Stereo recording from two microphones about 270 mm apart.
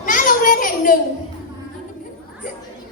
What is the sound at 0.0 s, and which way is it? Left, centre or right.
Children playing, left.